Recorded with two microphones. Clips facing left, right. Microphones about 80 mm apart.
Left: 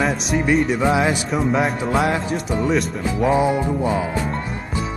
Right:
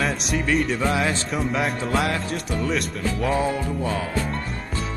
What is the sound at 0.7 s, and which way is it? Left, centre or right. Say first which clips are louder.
Speech: left 5 dB; centre.